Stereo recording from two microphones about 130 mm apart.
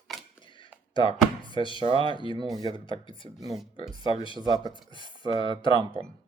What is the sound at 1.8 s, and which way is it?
Speech, 40° right (ahead or behind).